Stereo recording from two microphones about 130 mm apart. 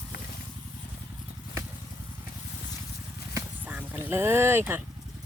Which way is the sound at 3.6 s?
15° right (ahead or behind).